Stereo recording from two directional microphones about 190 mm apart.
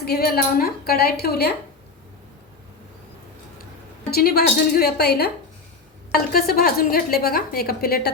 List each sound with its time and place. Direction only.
0.0 s a woman's voice: 55° left (ahead or behind)
4.1 s a woman's voice: 55° left (ahead or behind)
6.3 s a woman's voice: 50° left (ahead or behind)